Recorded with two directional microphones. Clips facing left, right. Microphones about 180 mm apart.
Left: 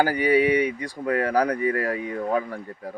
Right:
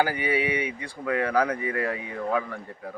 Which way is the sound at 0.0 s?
40° left (ahead or behind).